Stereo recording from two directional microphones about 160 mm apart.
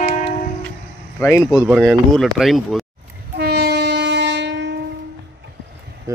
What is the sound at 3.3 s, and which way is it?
Train, 85° right.